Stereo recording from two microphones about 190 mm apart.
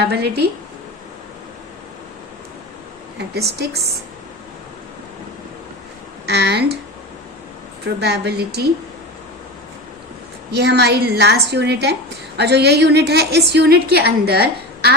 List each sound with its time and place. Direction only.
0.0 s a woman's voice: 55° right (ahead or behind)
3.2 s a woman's voice: 60° right (ahead or behind)
6.2 s a woman's voice: 60° right (ahead or behind)
8.0 s a woman's voice: 60° right (ahead or behind)
10.5 s a woman's voice: 60° right (ahead or behind)